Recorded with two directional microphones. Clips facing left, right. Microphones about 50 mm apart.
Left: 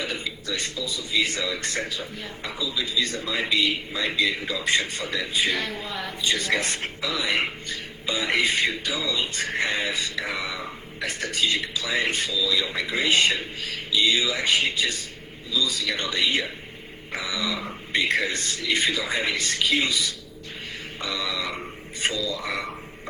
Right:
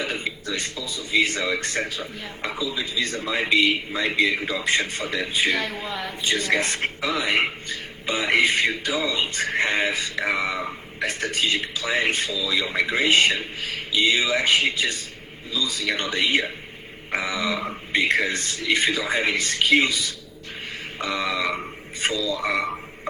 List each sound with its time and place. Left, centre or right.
0.0 s a man's voice: right
5.5 s a woman's voice: centre
6.2 s a man's voice: right